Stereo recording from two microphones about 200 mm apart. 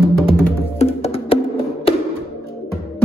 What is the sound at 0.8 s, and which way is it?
Music, 30° left (ahead or behind).